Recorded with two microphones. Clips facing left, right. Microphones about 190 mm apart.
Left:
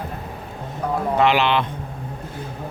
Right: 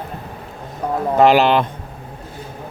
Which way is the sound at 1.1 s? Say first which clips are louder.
Right 6 dB; 40° right (ahead or behind).